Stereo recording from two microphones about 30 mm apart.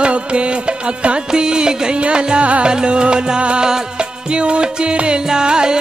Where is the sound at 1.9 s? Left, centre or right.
Right.